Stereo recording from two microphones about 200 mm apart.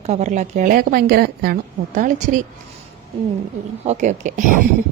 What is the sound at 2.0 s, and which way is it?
Speech, 40° right (ahead or behind).